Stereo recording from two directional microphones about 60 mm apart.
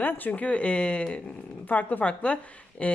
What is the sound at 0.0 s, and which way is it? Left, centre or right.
Speech, left.